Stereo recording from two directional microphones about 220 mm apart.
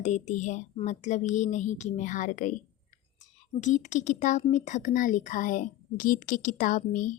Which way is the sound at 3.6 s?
35° left (ahead or behind).